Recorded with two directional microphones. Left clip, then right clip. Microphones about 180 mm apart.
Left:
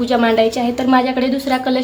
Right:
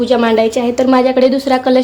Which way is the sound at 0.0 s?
15° right (ahead or behind).